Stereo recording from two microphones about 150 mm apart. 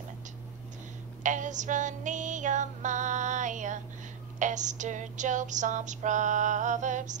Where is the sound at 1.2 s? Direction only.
55° right (ahead or behind).